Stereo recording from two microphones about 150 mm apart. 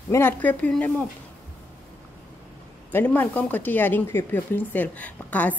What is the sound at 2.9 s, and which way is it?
Speech, 15° left (ahead or behind).